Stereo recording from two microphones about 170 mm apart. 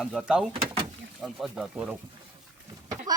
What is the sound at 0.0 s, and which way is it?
Speech, 5° right (ahead or behind).